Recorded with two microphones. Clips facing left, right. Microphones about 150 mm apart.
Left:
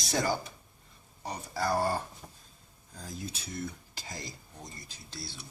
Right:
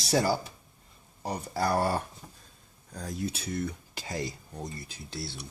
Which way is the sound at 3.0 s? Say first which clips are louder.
Right 7 dB; 65° right (ahead or behind).